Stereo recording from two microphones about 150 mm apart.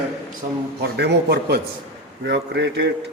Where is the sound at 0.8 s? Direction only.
90° right.